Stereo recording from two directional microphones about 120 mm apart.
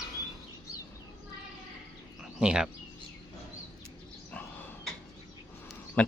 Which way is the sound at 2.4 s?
5° right (ahead or behind).